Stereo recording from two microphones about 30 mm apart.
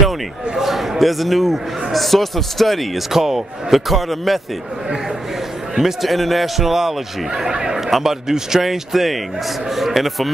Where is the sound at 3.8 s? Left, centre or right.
Centre.